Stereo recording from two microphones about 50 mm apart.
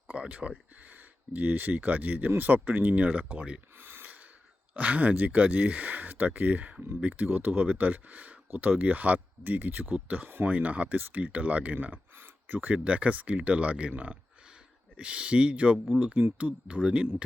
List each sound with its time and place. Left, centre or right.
0.1 s a sound: right
0.9 s speech: right
3.8 s gasp: right
4.7 s speech: right
12.1 s a sound: right
12.7 s speech: right